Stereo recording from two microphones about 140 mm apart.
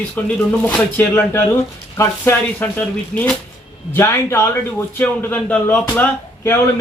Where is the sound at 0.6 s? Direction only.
10° left (ahead or behind).